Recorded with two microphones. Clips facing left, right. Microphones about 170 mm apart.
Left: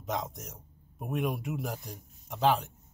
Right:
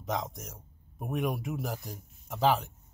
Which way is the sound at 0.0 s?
Centre (ahead or behind).